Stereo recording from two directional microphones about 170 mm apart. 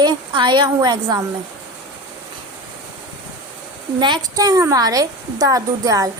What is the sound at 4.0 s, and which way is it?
A woman's voice, 25° right (ahead or behind).